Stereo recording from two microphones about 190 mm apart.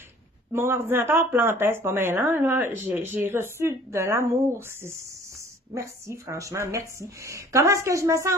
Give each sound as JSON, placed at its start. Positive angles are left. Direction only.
{"t": 0.5, "sound": "speech", "side_deg": -15}